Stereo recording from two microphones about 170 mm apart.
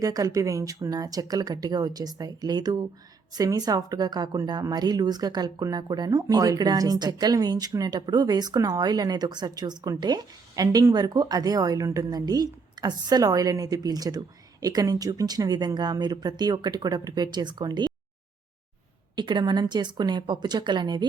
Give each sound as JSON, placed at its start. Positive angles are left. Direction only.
{"t": 0.0, "sound": "speech", "side_deg": -20}
{"t": 19.1, "sound": "speech", "side_deg": -25}